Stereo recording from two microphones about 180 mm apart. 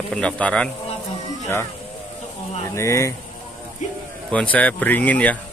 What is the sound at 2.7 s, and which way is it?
Speech, 15° left (ahead or behind).